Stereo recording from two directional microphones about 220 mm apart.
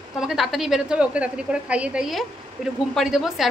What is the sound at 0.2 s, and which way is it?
A woman's voice, centre (ahead or behind).